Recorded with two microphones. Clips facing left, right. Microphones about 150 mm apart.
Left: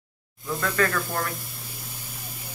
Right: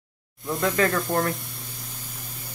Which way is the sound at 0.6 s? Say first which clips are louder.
Right 3 dB; 25° right (ahead or behind).